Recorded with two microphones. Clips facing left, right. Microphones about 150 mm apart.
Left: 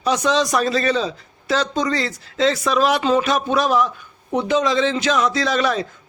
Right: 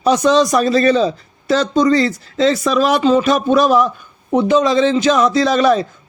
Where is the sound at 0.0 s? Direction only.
40° right (ahead or behind).